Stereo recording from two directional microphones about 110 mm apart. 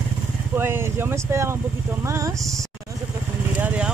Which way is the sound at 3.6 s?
15° right (ahead or behind).